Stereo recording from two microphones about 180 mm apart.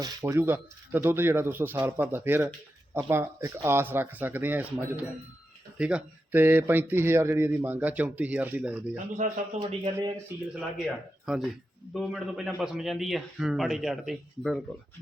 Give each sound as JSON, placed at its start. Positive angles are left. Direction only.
{"t": 0.0, "sound": "speech", "side_deg": -20}
{"t": 9.2, "sound": "a man's voice", "side_deg": -40}
{"t": 9.6, "sound": "a man's voice", "side_deg": -20}
{"t": 10.5, "sound": "a man's voice", "side_deg": 0}